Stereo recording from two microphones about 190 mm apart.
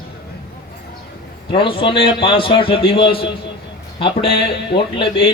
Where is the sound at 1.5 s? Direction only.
25° left (ahead or behind).